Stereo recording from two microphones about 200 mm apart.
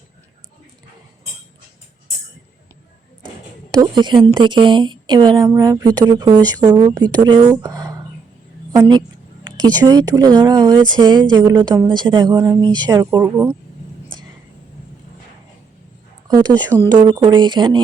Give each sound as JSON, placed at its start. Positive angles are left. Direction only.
{"t": 3.8, "sound": "a woman's voice", "side_deg": -20}
{"t": 7.6, "sound": "a sound", "side_deg": -15}
{"t": 8.7, "sound": "a woman's voice", "side_deg": -20}
{"t": 16.3, "sound": "a woman's voice", "side_deg": -20}